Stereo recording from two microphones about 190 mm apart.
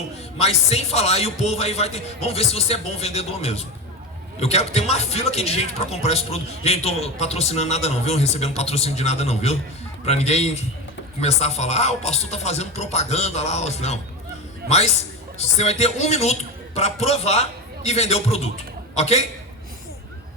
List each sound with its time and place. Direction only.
0.3 s a man's voice: 35° left (ahead or behind)
14.6 s a man's voice: 55° right (ahead or behind)
15.4 s a man's voice: 35° left (ahead or behind)